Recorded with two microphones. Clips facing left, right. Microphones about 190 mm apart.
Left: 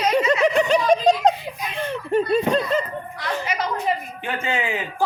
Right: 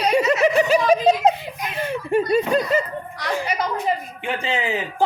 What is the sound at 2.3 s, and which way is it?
Speech, 10° right (ahead or behind).